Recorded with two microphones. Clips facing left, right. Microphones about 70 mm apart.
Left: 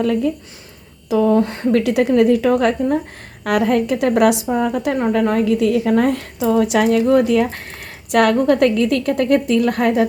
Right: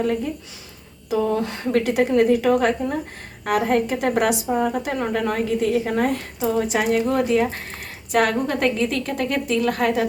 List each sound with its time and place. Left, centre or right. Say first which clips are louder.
0.0 s speech: left 4 dB; left
1.1 s a woman's voice: left 6 dB; left
1.8 s a woman's voice: left 3 dB; left
3.4 s a woman's voice: left 3 dB; left
6.7 s speech: left 5 dB; left
7.1 s a woman's voice: left 5 dB; left